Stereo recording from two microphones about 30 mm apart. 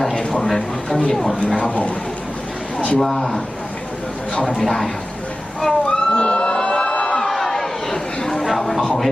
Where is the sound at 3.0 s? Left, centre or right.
Centre.